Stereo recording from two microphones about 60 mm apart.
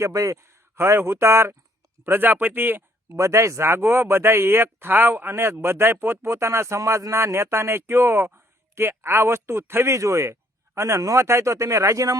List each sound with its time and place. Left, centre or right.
0.1 s a man's voice: right
0.3 s speech: right
2.0 s speech: right
3.2 s speech: right